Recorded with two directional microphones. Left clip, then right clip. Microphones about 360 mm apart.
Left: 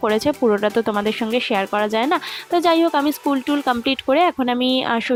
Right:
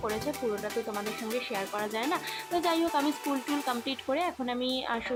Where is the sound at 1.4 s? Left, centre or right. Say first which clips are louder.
Left 14 dB; left.